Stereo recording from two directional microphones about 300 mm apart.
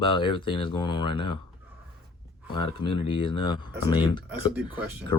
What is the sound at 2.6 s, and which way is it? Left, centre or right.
Speech, centre.